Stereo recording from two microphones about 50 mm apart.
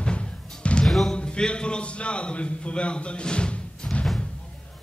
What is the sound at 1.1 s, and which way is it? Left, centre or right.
A man's voice, centre.